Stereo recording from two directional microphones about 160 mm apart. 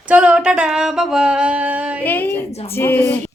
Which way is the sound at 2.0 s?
10° left (ahead or behind).